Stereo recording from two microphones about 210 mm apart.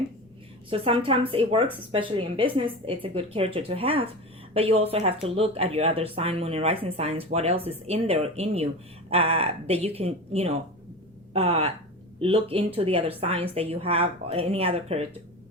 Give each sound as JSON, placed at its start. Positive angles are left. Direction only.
{"t": 0.7, "sound": "speech", "side_deg": -25}